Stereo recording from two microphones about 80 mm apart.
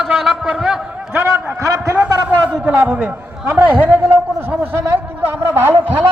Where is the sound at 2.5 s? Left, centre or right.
Centre.